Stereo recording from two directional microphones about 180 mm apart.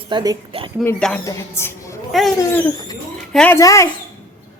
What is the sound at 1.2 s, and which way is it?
Speech, 15° left (ahead or behind).